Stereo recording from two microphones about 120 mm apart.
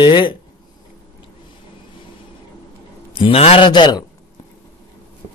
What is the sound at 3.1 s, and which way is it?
Speech, 55° left (ahead or behind).